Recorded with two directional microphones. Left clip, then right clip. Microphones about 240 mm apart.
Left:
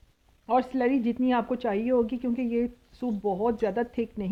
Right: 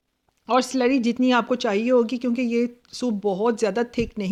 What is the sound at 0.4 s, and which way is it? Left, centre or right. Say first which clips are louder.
Speech: right 4 dB; right.